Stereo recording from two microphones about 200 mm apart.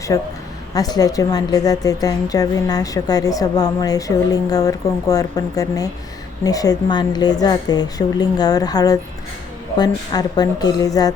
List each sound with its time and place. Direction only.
0.7 s a woman's voice: 20° left (ahead or behind)